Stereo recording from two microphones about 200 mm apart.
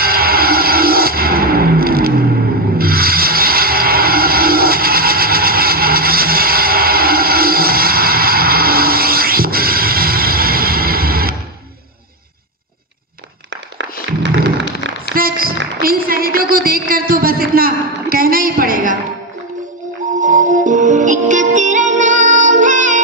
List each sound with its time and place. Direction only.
0.0 s music: 50° right (ahead or behind)
2.8 s vehicle: 50° right (ahead or behind)
14.2 s a sound: 60° right (ahead or behind)
15.1 s music: 45° right (ahead or behind)
20.2 s music: 40° right (ahead or behind)